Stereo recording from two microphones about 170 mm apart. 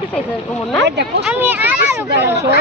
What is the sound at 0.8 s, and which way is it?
Speech, 90° right.